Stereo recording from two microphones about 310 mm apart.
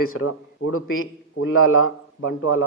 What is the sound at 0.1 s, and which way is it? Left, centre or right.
Speech, left.